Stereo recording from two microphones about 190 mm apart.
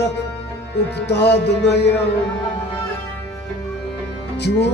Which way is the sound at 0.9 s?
60° left (ahead or behind).